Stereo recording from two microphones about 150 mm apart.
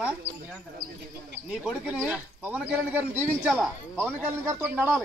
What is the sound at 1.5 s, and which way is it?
A man's voice, 5° right (ahead or behind).